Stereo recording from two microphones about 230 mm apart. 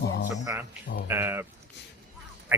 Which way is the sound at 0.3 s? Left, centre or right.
Centre.